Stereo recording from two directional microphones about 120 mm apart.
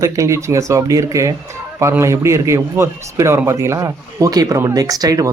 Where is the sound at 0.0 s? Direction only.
25° right (ahead or behind).